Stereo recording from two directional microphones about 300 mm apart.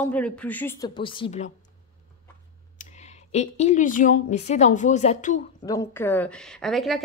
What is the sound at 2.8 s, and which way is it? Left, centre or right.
Speech, left.